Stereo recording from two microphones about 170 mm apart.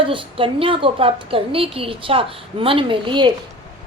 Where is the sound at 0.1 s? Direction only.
30° right (ahead or behind).